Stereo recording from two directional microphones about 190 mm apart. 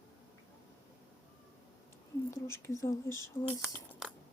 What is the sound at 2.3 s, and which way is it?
Speech, 15° left (ahead or behind).